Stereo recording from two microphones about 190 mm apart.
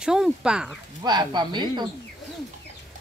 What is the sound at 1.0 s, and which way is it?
Speech, 20° right (ahead or behind).